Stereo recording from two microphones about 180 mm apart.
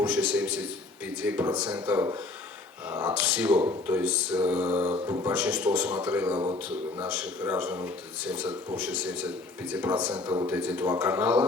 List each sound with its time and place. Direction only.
0.0 s speech: 10° right (ahead or behind)
4.6 s mantra: 25° right (ahead or behind)
5.0 s speech: 15° right (ahead or behind)
6.3 s mantra: 25° right (ahead or behind)
7.1 s speech: 10° right (ahead or behind)
10.2 s mantra: 25° right (ahead or behind)
10.4 s speech: 10° right (ahead or behind)